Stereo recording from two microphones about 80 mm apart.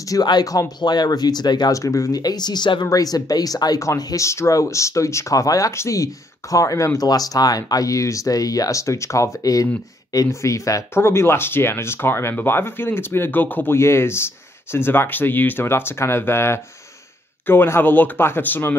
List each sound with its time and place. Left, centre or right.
0.1 s speech: left
1.7 s speech: left
2.9 s speech: left
11.0 s speech: left